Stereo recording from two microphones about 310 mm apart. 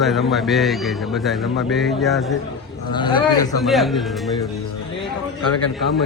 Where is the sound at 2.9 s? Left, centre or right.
Centre.